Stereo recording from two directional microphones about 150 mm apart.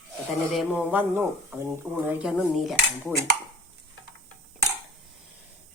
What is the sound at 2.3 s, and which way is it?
Cutlery, centre (ahead or behind).